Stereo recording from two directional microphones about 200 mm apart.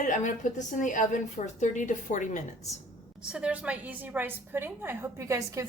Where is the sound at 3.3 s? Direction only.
5° right (ahead or behind).